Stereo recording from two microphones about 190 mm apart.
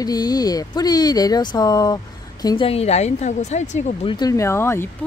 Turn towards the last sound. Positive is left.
turn(degrees=10)  # may be behind; listen again after turning